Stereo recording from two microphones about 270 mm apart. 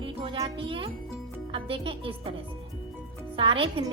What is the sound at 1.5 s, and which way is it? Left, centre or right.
A woman's voice, centre.